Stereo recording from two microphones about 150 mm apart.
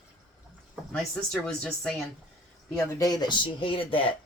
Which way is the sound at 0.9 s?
5° left (ahead or behind).